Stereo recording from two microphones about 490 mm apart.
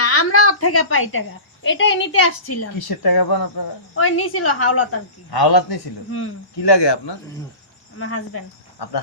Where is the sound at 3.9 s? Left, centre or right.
Left.